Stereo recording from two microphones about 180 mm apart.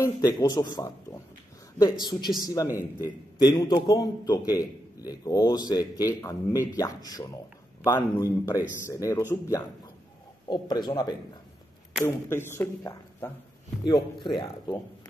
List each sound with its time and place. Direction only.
0.0 s speech: 20° left (ahead or behind)
10.5 s speech: 25° left (ahead or behind)
12.0 s speech: 15° left (ahead or behind)
13.8 s speech: 25° left (ahead or behind)